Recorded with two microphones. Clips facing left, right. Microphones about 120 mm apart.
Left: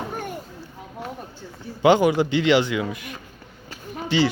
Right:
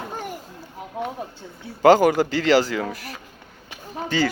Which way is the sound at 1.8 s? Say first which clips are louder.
Right 2 dB; 45° right (ahead or behind).